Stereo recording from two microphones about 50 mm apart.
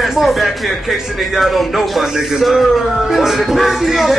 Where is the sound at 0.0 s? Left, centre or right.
Centre.